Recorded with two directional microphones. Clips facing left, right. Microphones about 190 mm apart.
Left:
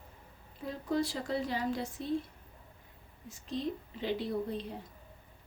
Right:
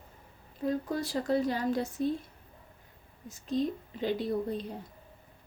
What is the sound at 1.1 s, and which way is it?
Speech, 45° right (ahead or behind).